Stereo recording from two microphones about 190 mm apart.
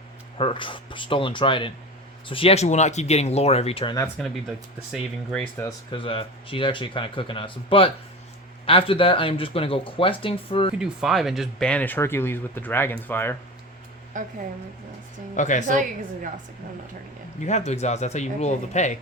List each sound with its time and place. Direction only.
0.3 s speech: 25° left (ahead or behind)
4.9 s speech: 5° left (ahead or behind)
5.6 s speech: 25° left (ahead or behind)
10.8 s speech: 5° right (ahead or behind)
14.1 s speech: 45° right (ahead or behind)
15.4 s speech: 40° left (ahead or behind)
17.4 s speech: 35° left (ahead or behind)